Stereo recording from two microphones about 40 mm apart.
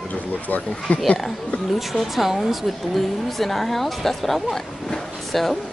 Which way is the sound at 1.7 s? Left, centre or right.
Centre.